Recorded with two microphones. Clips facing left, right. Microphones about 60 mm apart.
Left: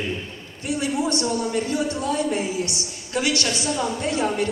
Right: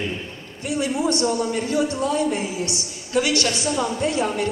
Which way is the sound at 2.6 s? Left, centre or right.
Left.